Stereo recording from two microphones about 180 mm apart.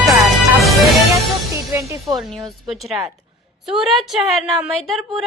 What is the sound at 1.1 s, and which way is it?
Music, 15° right (ahead or behind).